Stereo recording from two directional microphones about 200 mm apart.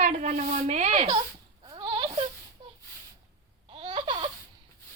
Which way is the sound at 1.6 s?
25° right (ahead or behind).